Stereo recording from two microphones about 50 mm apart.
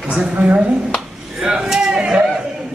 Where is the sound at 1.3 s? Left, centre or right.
Centre.